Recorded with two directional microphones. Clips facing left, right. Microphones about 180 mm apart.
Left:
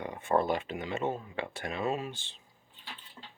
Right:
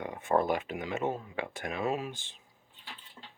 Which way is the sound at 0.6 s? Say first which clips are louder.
Even; 5° right (ahead or behind).